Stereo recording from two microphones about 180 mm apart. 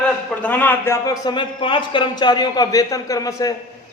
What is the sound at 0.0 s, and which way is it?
A man's voice, 5° left (ahead or behind).